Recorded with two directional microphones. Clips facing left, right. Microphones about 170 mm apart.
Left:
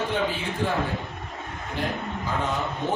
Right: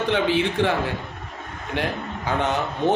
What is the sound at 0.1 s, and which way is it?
Speech, 80° right.